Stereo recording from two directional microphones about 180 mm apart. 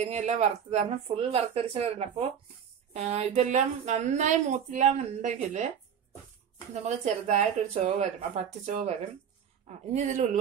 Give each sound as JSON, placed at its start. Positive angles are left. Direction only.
{"t": 0.1, "sound": "a woman's voice", "side_deg": -40}
{"t": 6.7, "sound": "a woman's voice", "side_deg": -40}
{"t": 9.9, "sound": "a woman's voice", "side_deg": -40}